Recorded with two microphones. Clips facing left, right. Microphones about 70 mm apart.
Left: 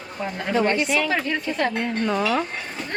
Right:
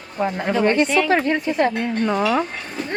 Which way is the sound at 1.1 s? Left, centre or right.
Right.